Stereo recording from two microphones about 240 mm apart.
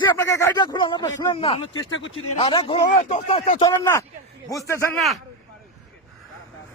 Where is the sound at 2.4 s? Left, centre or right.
Left.